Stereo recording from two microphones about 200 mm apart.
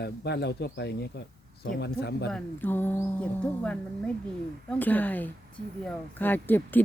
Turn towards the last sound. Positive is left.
turn(degrees=10)  # may be behind; listen again after turning